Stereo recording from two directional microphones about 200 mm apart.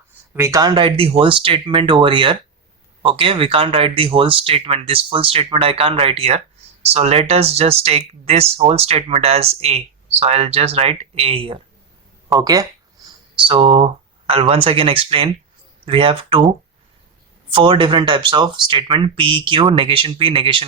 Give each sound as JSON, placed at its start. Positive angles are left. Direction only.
{"t": 0.3, "sound": "speech", "side_deg": -15}
{"t": 12.4, "sound": "speech", "side_deg": -15}
{"t": 17.5, "sound": "speech", "side_deg": -25}